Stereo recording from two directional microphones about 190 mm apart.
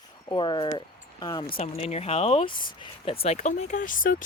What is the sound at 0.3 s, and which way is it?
Speech, 25° left (ahead or behind).